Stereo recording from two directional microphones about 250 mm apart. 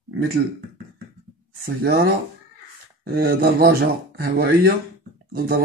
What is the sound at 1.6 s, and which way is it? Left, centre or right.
Speech, right.